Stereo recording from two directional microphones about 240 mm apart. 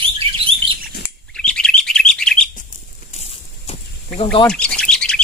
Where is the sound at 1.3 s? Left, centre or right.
Centre.